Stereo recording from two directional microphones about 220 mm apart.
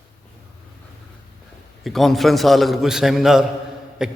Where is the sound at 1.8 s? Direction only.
Centre (ahead or behind).